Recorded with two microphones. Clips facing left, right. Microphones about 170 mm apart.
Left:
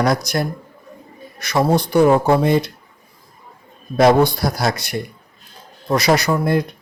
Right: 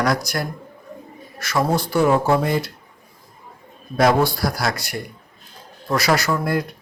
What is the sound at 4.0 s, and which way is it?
Speech, 20° left (ahead or behind).